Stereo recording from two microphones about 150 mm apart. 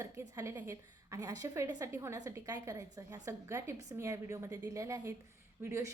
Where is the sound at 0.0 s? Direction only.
20° right (ahead or behind).